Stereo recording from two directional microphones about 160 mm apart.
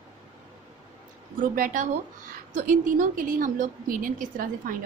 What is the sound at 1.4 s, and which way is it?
A woman's voice, 55° right (ahead or behind).